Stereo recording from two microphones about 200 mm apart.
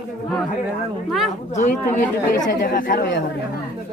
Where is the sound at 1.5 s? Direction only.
35° left (ahead or behind).